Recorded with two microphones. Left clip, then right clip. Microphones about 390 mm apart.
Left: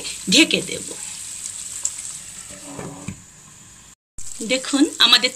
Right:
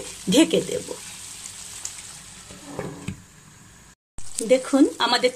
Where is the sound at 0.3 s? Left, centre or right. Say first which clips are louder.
Left 3 dB; centre.